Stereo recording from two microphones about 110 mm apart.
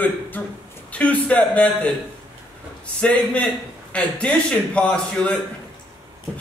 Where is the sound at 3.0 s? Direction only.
10° left (ahead or behind).